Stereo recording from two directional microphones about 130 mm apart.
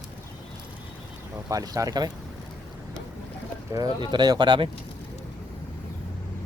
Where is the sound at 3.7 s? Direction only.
30° right (ahead or behind).